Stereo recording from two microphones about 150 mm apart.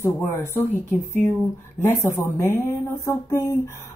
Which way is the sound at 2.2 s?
15° left (ahead or behind).